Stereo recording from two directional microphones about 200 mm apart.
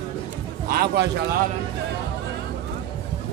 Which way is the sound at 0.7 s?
55° right (ahead or behind).